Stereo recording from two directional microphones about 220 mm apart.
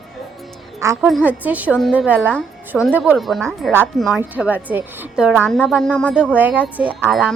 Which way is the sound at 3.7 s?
10° right (ahead or behind).